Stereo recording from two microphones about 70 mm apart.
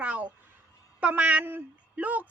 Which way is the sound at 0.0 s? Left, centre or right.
Centre.